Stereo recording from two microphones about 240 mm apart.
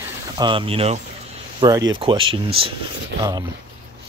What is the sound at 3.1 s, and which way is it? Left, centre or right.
Speech, right.